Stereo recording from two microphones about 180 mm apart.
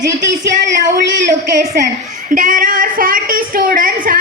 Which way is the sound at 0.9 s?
45° right (ahead or behind).